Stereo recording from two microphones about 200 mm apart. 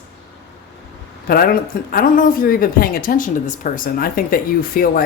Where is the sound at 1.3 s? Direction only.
50° left (ahead or behind).